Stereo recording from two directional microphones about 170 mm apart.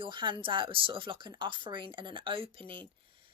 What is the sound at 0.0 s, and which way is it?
Speech, 30° right (ahead or behind).